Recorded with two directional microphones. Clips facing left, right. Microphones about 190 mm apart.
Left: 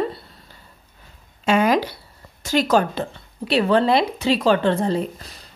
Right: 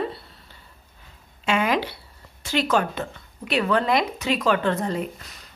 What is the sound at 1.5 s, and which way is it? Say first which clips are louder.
Speech: left 5 dB; 40° left (ahead or behind).